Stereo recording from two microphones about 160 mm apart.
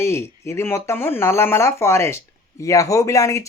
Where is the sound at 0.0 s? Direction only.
15° left (ahead or behind).